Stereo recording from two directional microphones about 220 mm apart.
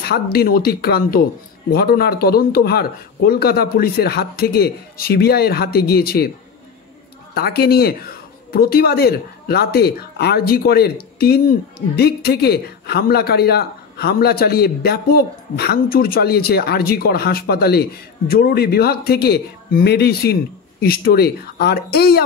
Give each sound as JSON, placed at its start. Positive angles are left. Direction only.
{"t": 0.0, "sound": "speech", "side_deg": 45}
{"t": 7.3, "sound": "speech", "side_deg": 45}